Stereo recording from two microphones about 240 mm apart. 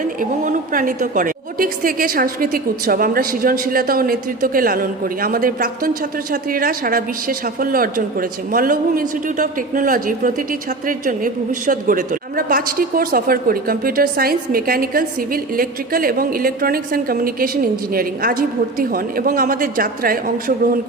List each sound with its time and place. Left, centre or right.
0.0 s a woman's voice: right